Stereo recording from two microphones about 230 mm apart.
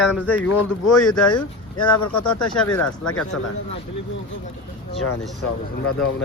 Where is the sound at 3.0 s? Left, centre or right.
Left.